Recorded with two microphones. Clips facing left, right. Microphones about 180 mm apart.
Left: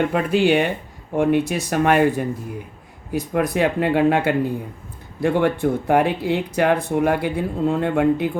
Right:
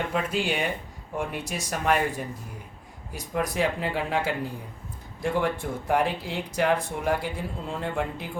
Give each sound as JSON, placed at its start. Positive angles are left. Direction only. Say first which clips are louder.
{"t": 0.1, "sound": "speech", "louder": "left 10 dB", "side_deg": 65}